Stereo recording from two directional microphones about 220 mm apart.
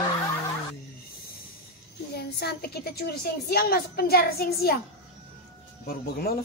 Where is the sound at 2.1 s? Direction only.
45° left (ahead or behind).